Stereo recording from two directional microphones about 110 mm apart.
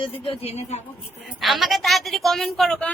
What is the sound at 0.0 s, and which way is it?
Speech, 55° left (ahead or behind).